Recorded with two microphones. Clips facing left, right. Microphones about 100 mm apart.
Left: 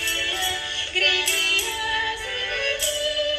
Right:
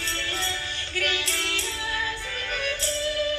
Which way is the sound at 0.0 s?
60° left (ahead or behind).